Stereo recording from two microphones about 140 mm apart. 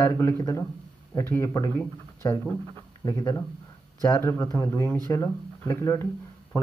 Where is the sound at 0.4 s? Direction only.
25° left (ahead or behind).